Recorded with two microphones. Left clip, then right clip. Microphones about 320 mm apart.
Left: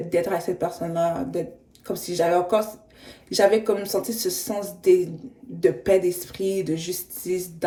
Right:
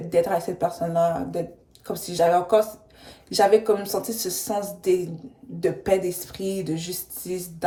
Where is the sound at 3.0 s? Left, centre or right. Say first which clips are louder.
Left 1 dB; centre.